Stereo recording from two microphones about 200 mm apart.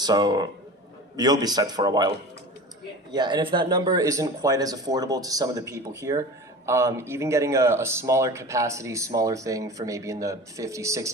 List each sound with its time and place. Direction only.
0.0 s speech: 20° right (ahead or behind)